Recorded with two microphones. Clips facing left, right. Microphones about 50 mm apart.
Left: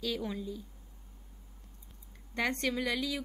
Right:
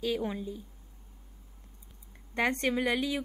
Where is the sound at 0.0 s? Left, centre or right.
Right.